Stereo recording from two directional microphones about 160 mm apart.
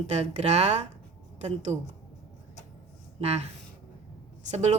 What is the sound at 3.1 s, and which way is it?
Speech, 40° right (ahead or behind).